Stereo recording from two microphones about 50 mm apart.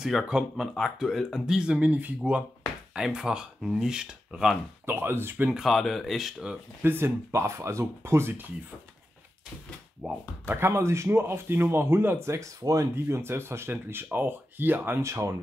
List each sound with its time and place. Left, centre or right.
0.2 s speech: centre
0.7 s speech: centre
1.4 s speech: centre
1.8 s speech: right
2.9 s speech: centre
4.8 s a man's voice: right
5.7 s speech: centre
6.8 s a man's voice: right
7.3 s speech: right
10.0 s speech: right
10.7 s a man's voice: right
12.3 s speech: right
12.9 s a man's voice: right
15.0 s speech: right